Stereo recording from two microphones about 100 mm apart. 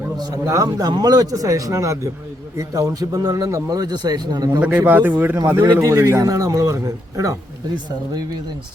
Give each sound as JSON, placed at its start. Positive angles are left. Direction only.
{"t": 0.2, "sound": "speech", "side_deg": -35}
{"t": 4.8, "sound": "speech", "side_deg": -20}
{"t": 5.8, "sound": "speech", "side_deg": -30}